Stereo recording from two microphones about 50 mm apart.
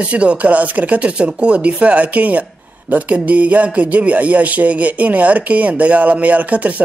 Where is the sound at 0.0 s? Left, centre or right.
Right.